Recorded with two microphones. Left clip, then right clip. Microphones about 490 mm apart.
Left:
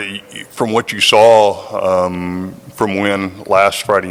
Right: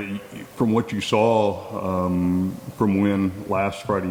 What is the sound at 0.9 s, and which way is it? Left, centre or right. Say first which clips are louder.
Speech: left 15 dB; left.